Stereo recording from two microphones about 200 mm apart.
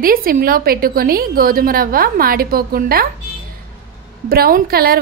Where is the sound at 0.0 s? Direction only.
45° right (ahead or behind).